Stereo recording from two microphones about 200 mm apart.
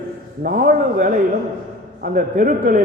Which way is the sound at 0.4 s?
45° right (ahead or behind).